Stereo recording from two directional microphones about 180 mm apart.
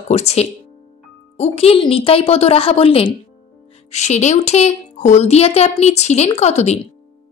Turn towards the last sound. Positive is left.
turn(degrees=35)  # may be behind; listen again after turning